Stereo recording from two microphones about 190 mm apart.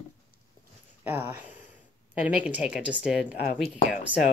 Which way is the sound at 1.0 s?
10° right (ahead or behind).